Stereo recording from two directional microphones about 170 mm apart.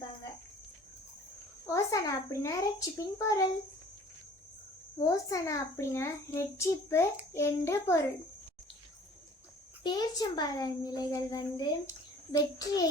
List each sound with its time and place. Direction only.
1.6 s cricket: 20° left (ahead or behind)
3.2 s a child's voice: 20° left (ahead or behind)
4.9 s a child's voice: 20° left (ahead or behind)
9.8 s a child's voice: 25° left (ahead or behind)